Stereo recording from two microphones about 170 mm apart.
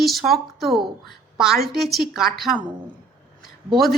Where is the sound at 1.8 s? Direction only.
Centre (ahead or behind).